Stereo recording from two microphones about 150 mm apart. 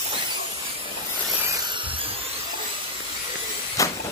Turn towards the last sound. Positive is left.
turn(degrees=20)  # may be behind; listen again after turning